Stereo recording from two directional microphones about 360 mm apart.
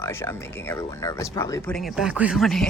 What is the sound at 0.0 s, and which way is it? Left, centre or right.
A woman's voice, centre.